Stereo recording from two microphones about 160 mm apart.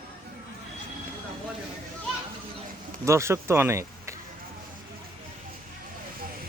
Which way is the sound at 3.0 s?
15° right (ahead or behind).